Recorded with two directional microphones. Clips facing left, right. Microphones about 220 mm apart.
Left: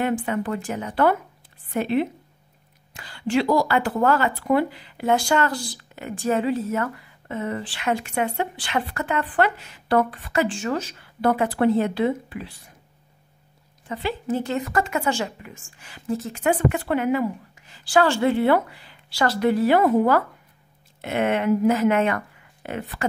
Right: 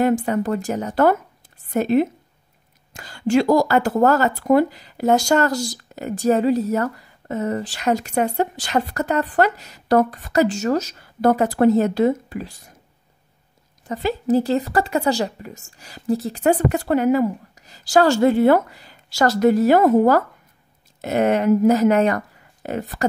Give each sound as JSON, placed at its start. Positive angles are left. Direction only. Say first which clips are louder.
{"t": 0.0, "sound": "speech", "louder": "right 5 dB", "side_deg": -40}
{"t": 13.8, "sound": "speech", "louder": "right 6 dB", "side_deg": -40}